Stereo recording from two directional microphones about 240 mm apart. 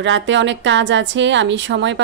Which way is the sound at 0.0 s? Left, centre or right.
Right.